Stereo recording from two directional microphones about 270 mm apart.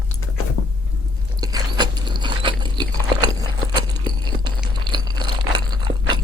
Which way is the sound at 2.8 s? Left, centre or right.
Centre.